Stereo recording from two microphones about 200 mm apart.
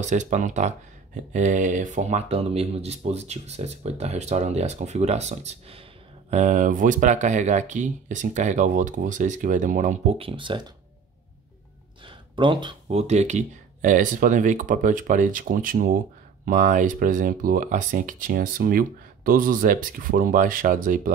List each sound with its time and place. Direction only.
0.0 s speech: 35° right (ahead or behind)
12.1 s speech: 25° right (ahead or behind); by 21.1 s 40° right (ahead or behind)